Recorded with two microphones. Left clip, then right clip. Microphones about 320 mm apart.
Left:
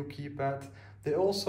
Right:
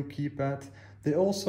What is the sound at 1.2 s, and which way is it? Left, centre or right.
Speech, centre.